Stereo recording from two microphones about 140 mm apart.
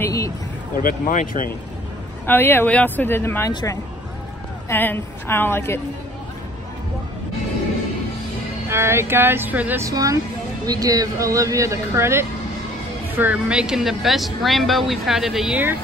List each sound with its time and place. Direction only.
0.0 s vehicle: 20° left (ahead or behind)
0.8 s speech: 90° left
2.2 s speech: 15° left (ahead or behind)
8.6 s speech: 20° right (ahead or behind)
9.8 s speech: 25° right (ahead or behind); by 15.6 s 5° right (ahead or behind)